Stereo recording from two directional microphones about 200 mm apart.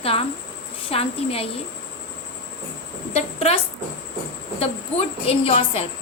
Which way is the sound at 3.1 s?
30° left (ahead or behind).